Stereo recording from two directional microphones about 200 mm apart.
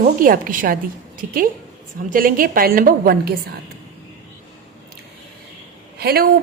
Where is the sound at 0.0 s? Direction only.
45° right (ahead or behind).